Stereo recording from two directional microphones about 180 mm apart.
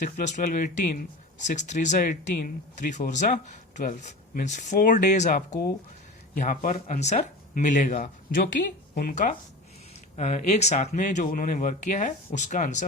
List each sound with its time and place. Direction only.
0.0 s speech: 45° left (ahead or behind)
8.4 s speech: 55° left (ahead or behind)
10.2 s speech: 40° left (ahead or behind)